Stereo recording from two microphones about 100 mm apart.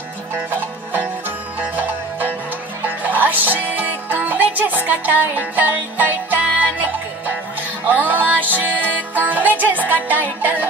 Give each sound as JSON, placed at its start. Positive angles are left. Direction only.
{"t": 0.5, "sound": "music", "side_deg": -20}